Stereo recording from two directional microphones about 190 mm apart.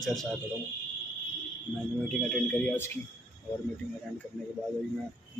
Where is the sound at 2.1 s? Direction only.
5° left (ahead or behind).